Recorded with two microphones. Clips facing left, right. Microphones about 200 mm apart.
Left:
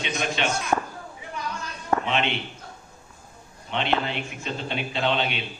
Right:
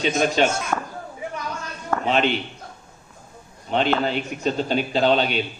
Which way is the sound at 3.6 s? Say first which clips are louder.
Right 5 dB; 40° right (ahead or behind).